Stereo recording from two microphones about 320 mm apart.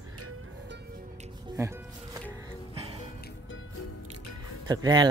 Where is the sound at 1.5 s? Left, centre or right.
Centre.